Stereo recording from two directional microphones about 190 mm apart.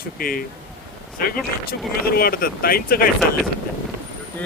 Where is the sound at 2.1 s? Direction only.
50° left (ahead or behind).